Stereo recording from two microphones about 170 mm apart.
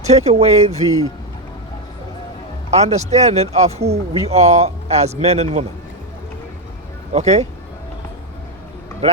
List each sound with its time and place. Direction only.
0.0 s speech: 40° right (ahead or behind)
2.6 s speech: 40° right (ahead or behind)
7.1 s speech: 40° right (ahead or behind)